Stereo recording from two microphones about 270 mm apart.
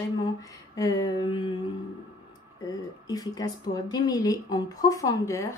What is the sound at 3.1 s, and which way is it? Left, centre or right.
A woman's voice, centre.